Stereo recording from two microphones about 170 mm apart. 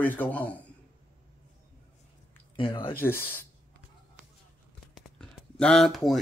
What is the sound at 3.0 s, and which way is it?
Speech, 10° left (ahead or behind).